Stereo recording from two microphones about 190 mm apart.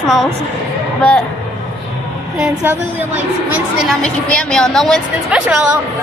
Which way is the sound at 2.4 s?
10° right (ahead or behind).